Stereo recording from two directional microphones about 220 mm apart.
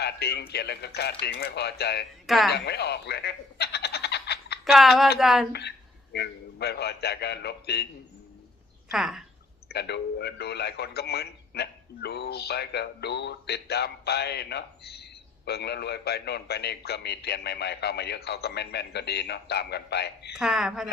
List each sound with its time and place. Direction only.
0.0 s a man's voice: 50° left (ahead or behind)
2.2 s speech: centre (ahead or behind)
2.5 s frog: 50° left (ahead or behind)
4.6 s speech: centre (ahead or behind)
5.5 s a man's voice: 50° left (ahead or behind)
8.9 s speech: centre (ahead or behind)
9.6 s a man's voice: 50° left (ahead or behind)
20.3 s speech: centre (ahead or behind)